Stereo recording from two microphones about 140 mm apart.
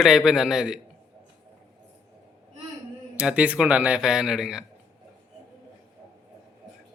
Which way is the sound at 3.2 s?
10° right (ahead or behind).